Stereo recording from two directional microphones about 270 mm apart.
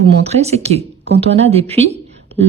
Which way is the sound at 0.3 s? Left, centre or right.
Right.